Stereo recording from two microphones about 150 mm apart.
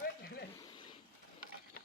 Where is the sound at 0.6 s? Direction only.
30° left (ahead or behind).